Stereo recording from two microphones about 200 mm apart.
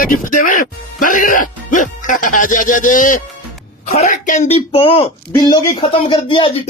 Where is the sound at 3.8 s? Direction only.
35° left (ahead or behind).